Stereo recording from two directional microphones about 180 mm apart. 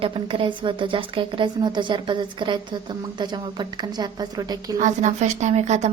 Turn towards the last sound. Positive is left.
turn(degrees=-40)  # may be behind; listen again after turning